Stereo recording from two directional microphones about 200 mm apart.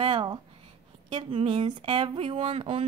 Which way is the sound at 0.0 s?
25° right (ahead or behind).